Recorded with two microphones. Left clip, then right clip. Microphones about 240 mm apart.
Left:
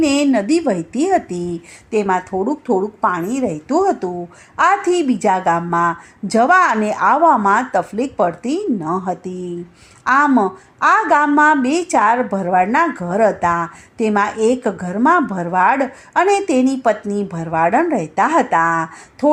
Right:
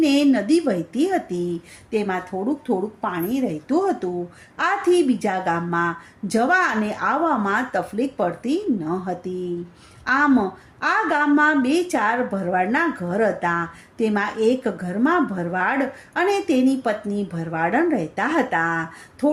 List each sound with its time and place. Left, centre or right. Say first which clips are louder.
0.0 s a woman's voice: left 3 dB; left